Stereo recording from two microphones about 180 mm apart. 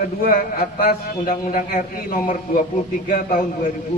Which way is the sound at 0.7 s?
50° left (ahead or behind).